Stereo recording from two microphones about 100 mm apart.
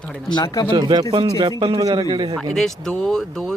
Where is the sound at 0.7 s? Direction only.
50° right (ahead or behind).